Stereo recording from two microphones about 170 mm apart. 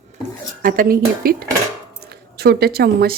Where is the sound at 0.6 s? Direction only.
55° right (ahead or behind).